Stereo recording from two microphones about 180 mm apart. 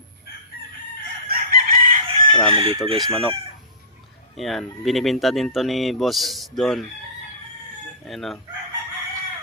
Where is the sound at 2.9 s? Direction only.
25° right (ahead or behind).